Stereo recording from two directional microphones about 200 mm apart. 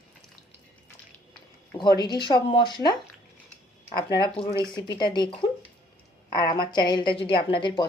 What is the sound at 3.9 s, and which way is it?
A woman's voice, 20° left (ahead or behind).